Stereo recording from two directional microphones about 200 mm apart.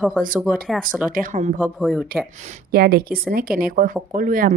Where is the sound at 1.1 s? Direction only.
40° right (ahead or behind).